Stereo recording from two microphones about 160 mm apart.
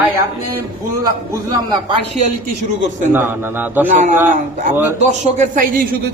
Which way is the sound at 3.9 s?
50° right (ahead or behind).